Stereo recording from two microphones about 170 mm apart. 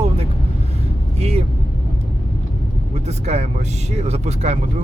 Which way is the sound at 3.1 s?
40° right (ahead or behind).